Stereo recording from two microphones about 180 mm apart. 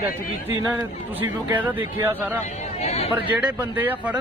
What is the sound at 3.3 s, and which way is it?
Speech, 10° right (ahead or behind).